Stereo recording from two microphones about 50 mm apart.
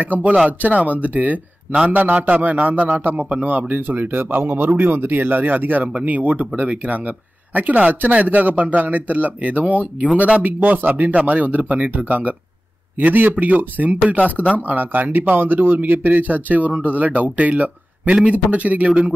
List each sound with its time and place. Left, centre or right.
0.0 s a man's voice: right